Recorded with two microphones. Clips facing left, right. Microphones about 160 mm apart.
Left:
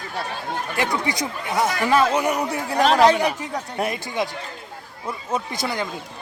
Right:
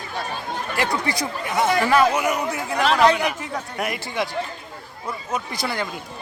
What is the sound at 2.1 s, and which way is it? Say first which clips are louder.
Speech: left 1 dB; 35° left (ahead or behind).